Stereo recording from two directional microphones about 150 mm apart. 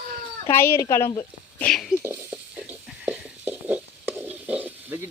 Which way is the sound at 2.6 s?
5° right (ahead or behind).